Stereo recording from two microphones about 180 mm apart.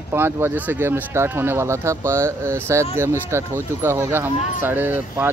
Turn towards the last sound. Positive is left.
turn(degrees=-10)  # may be behind; listen again after turning